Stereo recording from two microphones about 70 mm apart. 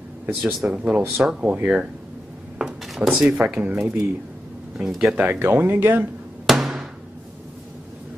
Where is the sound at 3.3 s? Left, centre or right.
Centre.